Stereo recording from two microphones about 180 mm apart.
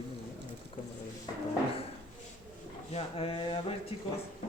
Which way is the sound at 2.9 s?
30° left (ahead or behind).